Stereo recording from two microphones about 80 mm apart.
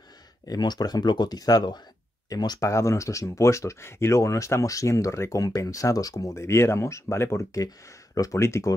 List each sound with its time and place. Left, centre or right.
0.5 s speech: left
2.6 s speech: left
7.5 s speech: left